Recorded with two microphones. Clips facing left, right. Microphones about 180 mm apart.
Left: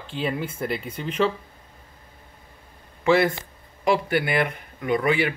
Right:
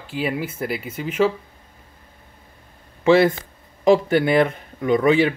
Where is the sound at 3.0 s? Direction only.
20° right (ahead or behind).